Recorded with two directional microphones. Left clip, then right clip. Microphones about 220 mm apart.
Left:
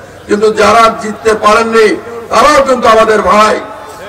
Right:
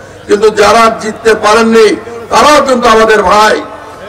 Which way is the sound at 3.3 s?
45° right (ahead or behind).